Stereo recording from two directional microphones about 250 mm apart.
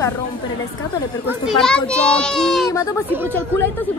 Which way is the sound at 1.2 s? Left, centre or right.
Centre.